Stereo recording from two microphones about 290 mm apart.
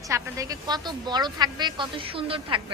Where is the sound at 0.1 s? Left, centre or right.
Centre.